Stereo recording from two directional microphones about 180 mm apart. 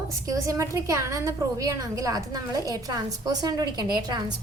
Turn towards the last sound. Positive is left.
turn(degrees=-25)  # may be behind; listen again after turning